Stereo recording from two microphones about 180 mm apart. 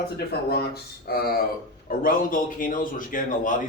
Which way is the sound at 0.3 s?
60° left (ahead or behind).